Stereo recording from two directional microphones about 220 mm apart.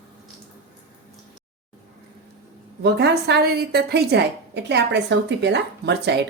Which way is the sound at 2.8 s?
50° right (ahead or behind).